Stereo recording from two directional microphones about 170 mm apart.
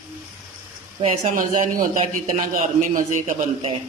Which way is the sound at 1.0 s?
40° right (ahead or behind).